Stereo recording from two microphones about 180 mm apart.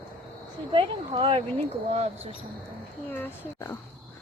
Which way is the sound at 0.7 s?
30° right (ahead or behind).